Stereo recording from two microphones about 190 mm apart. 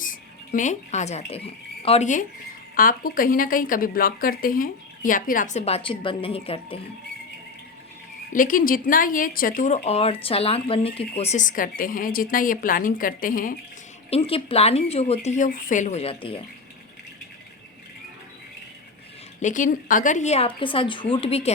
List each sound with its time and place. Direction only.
0.0 s speech: 45° left (ahead or behind)
8.3 s speech: 45° left (ahead or behind)
14.1 s speech: 30° left (ahead or behind)
19.4 s speech: 40° left (ahead or behind)